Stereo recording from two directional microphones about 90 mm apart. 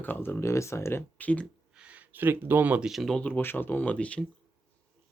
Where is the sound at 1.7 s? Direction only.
15° right (ahead or behind).